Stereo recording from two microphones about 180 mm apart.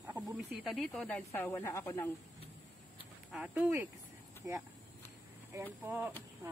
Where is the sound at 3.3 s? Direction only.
10° right (ahead or behind).